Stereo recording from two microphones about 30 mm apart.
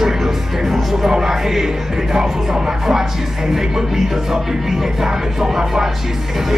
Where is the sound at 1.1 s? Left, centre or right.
Centre.